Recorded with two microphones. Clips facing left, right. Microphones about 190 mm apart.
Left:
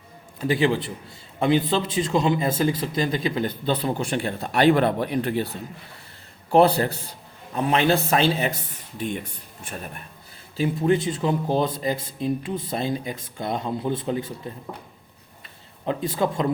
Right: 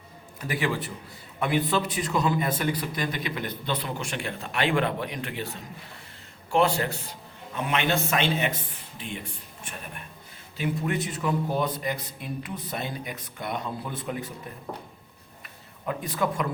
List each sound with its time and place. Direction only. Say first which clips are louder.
0.3 s a man's voice: left 7 dB; 25° left (ahead or behind)
10.6 s a man's voice: left 7 dB; 30° left (ahead or behind)
15.9 s a man's voice: left 4 dB; 25° left (ahead or behind)